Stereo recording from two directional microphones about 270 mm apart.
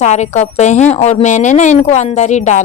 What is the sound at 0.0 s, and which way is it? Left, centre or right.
Speech, left.